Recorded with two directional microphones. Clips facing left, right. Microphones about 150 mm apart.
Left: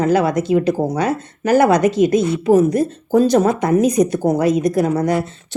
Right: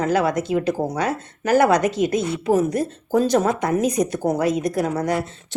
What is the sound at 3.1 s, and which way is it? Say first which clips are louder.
A woman's voice: left 4 dB; 30° left (ahead or behind).